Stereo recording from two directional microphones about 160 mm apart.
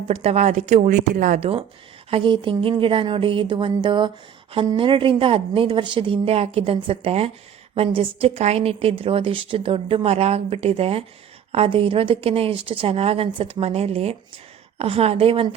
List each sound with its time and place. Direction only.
0.1 s speech: 40° right (ahead or behind)
1.4 s a woman's voice: 40° right (ahead or behind)